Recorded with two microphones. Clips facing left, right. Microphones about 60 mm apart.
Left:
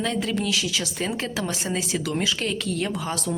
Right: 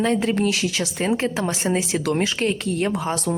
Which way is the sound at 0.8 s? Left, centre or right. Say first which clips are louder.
Right 6 dB; right.